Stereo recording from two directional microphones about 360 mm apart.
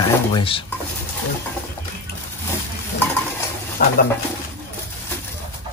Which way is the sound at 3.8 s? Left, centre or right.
Left.